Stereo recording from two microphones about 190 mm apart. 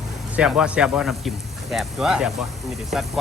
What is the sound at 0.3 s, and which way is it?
Speech, 5° right (ahead or behind).